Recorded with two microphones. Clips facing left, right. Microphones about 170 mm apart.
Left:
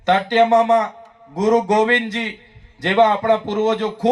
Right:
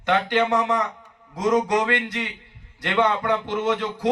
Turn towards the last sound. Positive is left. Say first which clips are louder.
# left 6 dB
turn(degrees=25)  # may be behind; listen again after turning